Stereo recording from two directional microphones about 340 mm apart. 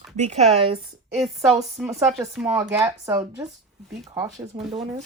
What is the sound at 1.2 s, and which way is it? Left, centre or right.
Speech, centre.